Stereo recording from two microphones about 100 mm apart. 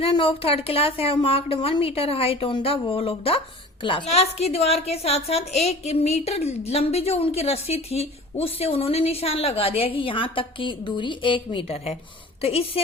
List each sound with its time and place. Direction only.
0.0 s a woman's voice: 65° left (ahead or behind)
3.8 s a woman's voice: 75° left (ahead or behind)
12.4 s a woman's voice: 80° left